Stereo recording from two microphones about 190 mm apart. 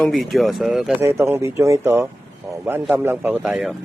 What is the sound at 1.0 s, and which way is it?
A man's voice, 15° right (ahead or behind).